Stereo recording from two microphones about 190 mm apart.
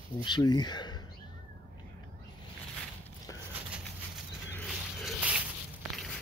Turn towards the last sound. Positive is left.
turn(degrees=5)  # may be behind; listen again after turning